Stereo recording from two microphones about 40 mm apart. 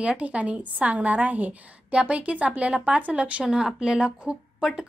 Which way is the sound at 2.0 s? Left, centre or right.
Right.